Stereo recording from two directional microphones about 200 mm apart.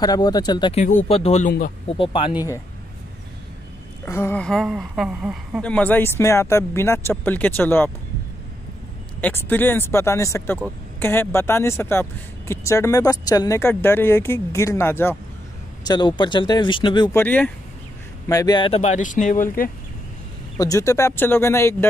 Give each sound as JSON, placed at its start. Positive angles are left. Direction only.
{"t": 0.0, "sound": "speech", "side_deg": 20}
{"t": 4.0, "sound": "speech", "side_deg": 10}
{"t": 9.2, "sound": "speech", "side_deg": 10}
{"t": 15.9, "sound": "speech", "side_deg": 20}
{"t": 17.2, "sound": "speech", "side_deg": 10}
{"t": 20.5, "sound": "speech", "side_deg": 15}